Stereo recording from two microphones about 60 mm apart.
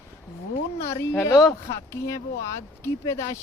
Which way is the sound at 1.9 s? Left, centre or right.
Left.